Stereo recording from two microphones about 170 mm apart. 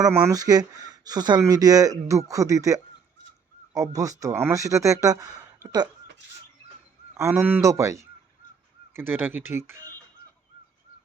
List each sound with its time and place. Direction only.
0.0 s speech: 20° right (ahead or behind)
7.1 s speech: 15° right (ahead or behind)